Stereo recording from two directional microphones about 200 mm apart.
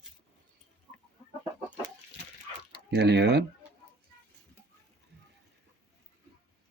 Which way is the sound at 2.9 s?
55° right (ahead or behind).